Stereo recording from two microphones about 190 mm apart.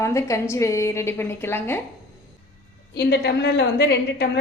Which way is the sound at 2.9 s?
55° left (ahead or behind).